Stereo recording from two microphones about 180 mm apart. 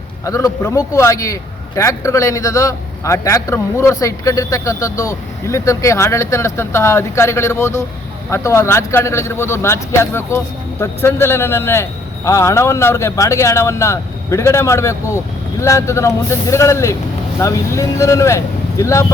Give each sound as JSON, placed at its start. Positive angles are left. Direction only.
{"t": 0.3, "sound": "a man's voice", "side_deg": 20}